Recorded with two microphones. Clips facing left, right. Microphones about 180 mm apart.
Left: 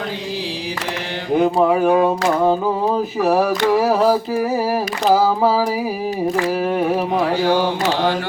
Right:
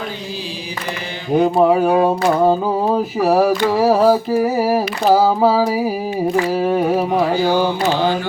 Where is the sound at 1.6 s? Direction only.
25° right (ahead or behind).